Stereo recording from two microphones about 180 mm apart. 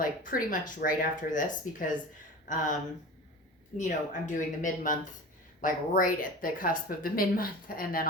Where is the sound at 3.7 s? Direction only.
45° left (ahead or behind).